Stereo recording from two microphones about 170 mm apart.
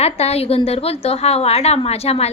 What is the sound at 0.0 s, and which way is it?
A woman's voice, 35° left (ahead or behind).